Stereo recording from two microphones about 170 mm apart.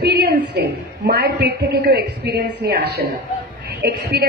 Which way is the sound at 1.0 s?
70° right (ahead or behind).